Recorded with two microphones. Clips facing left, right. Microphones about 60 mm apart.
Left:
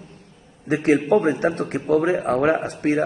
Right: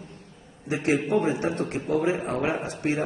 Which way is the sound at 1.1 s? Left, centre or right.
Left.